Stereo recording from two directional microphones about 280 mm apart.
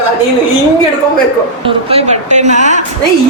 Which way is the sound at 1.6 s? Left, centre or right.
Right.